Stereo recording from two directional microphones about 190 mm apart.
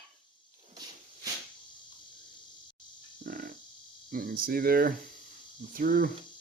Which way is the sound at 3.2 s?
45° right (ahead or behind).